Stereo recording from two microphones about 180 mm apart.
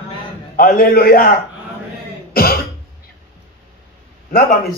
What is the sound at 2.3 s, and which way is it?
Cough, 55° left (ahead or behind).